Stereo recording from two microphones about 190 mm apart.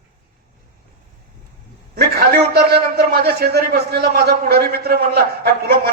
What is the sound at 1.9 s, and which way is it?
A man's voice, 55° right (ahead or behind).